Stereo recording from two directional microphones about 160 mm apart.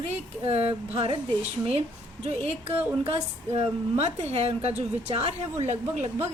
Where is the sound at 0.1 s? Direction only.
40° right (ahead or behind).